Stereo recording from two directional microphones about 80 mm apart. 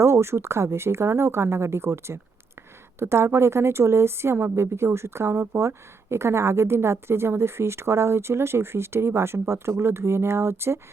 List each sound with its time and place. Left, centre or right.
0.0 s a woman's voice: right